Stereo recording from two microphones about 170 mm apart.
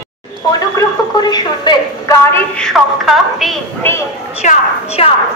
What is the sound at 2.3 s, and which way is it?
A woman's voice, 5° left (ahead or behind).